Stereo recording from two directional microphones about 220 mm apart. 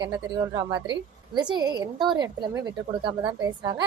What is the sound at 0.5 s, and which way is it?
A woman's voice, 15° right (ahead or behind).